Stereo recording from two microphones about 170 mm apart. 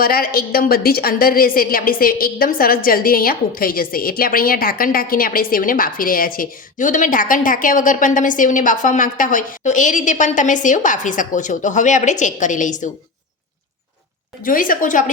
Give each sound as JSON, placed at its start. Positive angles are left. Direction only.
{"t": 0.0, "sound": "a woman's voice", "side_deg": 60}
{"t": 14.4, "sound": "a woman's voice", "side_deg": 55}